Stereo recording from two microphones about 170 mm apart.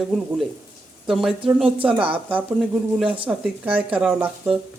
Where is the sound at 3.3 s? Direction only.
10° right (ahead or behind).